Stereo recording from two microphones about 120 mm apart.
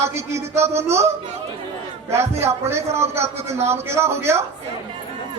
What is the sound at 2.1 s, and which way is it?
A man's voice, 20° right (ahead or behind).